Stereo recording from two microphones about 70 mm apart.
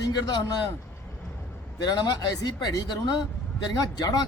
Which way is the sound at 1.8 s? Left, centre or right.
Left.